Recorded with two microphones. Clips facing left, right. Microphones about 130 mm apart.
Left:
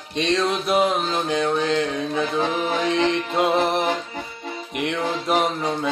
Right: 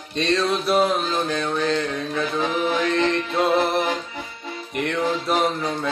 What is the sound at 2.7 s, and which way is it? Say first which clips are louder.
Music: left 2 dB; 15° left (ahead or behind).